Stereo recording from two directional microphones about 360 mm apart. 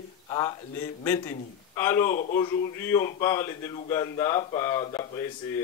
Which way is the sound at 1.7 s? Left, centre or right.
Centre.